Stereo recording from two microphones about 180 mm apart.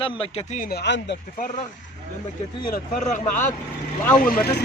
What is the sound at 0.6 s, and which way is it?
Speech, 60° left (ahead or behind).